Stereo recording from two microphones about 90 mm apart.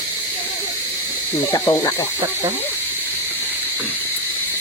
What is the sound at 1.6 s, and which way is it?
Speech, 30° left (ahead or behind).